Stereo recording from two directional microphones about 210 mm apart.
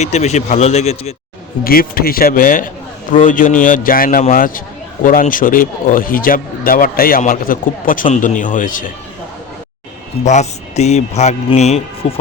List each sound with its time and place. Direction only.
0.0 s speech: 30° left (ahead or behind)
1.6 s speech: 45° left (ahead or behind)
10.2 s speech: 35° left (ahead or behind)